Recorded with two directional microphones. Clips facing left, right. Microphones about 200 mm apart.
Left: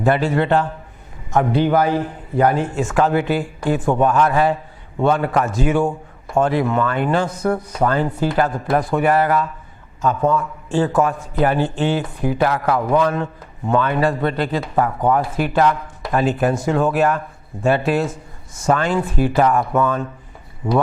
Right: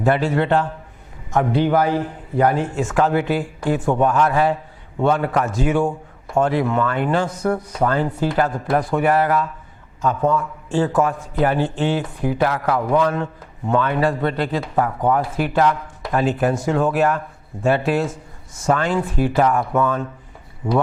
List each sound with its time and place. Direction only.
0.0 s a man's voice: 15° left (ahead or behind)
10.7 s a man's voice: 10° left (ahead or behind)
10.9 s a man's voice: 20° left (ahead or behind)
15.2 s a man's voice: 15° left (ahead or behind)